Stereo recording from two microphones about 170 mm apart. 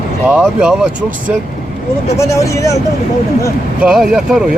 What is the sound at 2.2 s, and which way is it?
Speech, 20° left (ahead or behind).